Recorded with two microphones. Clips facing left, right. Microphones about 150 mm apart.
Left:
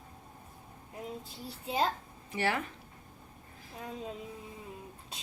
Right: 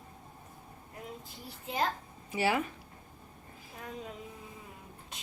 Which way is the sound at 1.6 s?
30° left (ahead or behind).